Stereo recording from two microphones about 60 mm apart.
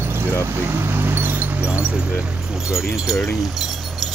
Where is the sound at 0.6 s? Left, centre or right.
Right.